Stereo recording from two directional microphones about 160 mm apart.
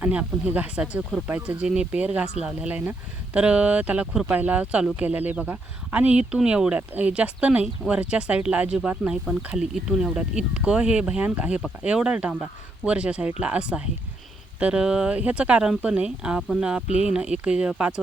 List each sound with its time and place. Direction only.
0.0 s speech: 10° right (ahead or behind)